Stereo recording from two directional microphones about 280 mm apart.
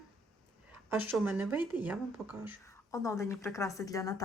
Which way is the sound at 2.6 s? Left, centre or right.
Centre.